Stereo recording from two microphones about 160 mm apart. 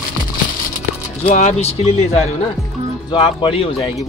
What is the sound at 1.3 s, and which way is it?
Speech, 45° left (ahead or behind).